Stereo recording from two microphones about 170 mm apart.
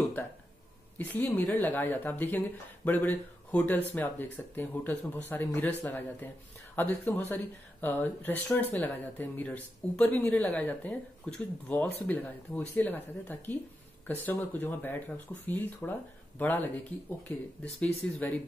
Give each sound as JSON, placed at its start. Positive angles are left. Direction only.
{"t": 0.9, "sound": "speech", "side_deg": 10}